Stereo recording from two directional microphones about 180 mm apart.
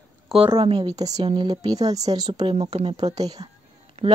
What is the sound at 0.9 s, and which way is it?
A woman's voice, 20° right (ahead or behind).